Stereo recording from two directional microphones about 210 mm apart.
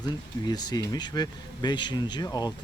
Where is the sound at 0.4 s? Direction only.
20° left (ahead or behind).